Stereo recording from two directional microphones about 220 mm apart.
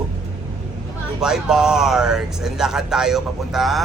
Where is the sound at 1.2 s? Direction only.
5° right (ahead or behind).